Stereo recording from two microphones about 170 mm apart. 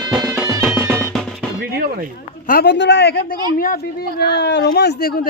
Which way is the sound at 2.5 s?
70° left (ahead or behind).